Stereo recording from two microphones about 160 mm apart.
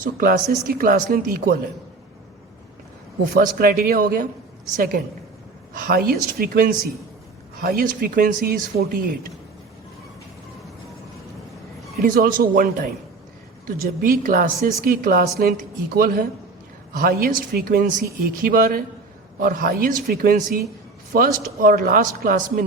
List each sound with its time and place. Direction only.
0.0 s speech: 60° right (ahead or behind)
3.3 s a man's voice: 65° right (ahead or behind)
12.0 s a man's voice: 60° right (ahead or behind)